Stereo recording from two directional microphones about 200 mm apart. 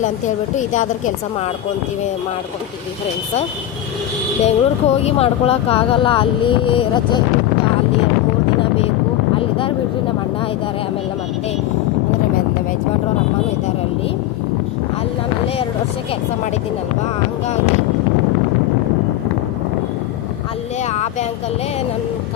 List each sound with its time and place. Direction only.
0.0 s a woman's voice: 40° left (ahead or behind)
4.4 s speech: 30° left (ahead or behind)
20.8 s a sound: 35° left (ahead or behind)